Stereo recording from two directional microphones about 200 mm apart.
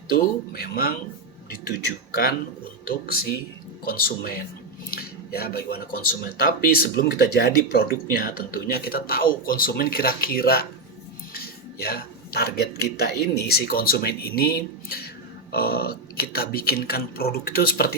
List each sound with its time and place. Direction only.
0.1 s speech: 50° left (ahead or behind)
2.8 s speech: 50° left (ahead or behind)